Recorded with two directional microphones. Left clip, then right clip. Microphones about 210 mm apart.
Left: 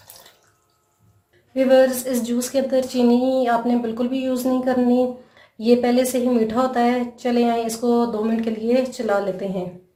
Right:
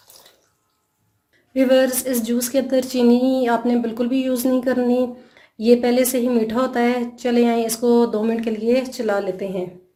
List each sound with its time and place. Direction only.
1.5 s a woman's voice: 45° right (ahead or behind)